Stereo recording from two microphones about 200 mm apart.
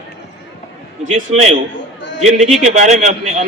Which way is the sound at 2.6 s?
35° right (ahead or behind).